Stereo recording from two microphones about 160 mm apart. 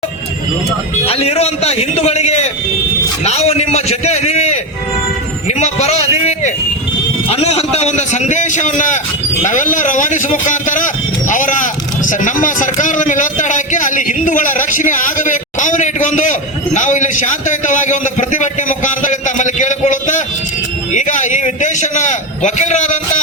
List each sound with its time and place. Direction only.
1.0 s a man's voice: 35° left (ahead or behind)
5.5 s a sound: 45° left (ahead or behind)
7.3 s a man's voice: 40° left (ahead or behind)